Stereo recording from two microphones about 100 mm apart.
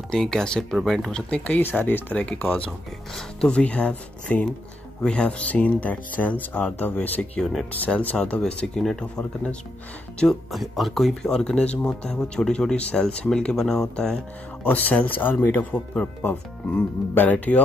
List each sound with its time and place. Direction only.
0.1 s speech: 5° left (ahead or behind)
1.3 s speech: 15° left (ahead or behind)
14.6 s speech: 15° left (ahead or behind)